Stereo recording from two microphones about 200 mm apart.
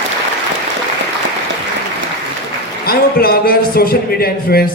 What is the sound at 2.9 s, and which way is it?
A man's voice, 50° left (ahead or behind).